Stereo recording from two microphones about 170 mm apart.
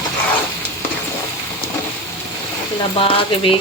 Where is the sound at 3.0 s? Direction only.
30° left (ahead or behind).